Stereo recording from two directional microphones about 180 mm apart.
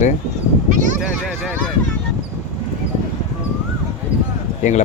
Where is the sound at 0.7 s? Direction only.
45° right (ahead or behind).